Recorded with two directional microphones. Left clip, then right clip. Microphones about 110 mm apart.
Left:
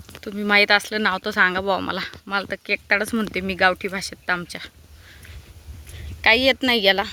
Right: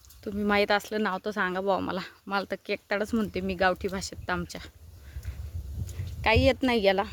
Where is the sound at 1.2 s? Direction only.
5° left (ahead or behind).